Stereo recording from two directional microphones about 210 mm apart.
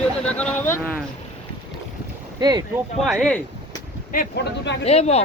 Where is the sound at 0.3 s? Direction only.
5° left (ahead or behind).